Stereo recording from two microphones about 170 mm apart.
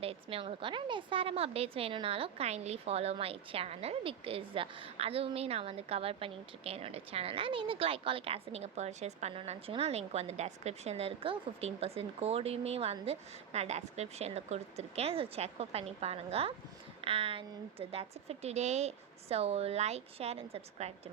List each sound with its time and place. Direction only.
0.0 s a woman's voice: 35° right (ahead or behind)